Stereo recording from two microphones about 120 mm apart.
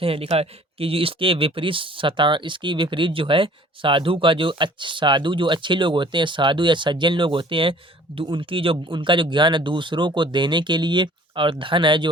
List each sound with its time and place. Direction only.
0.0 s speech: 50° right (ahead or behind)